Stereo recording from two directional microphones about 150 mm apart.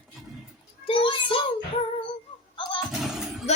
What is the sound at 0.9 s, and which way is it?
Child singing, 35° left (ahead or behind).